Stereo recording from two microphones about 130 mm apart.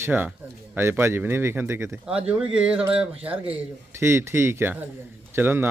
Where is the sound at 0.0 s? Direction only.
15° right (ahead or behind).